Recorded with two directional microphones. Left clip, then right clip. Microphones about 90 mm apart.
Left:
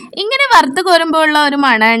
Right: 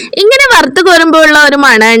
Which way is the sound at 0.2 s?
35° right (ahead or behind).